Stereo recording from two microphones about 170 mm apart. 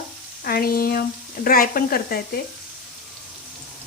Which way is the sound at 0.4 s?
60° left (ahead or behind).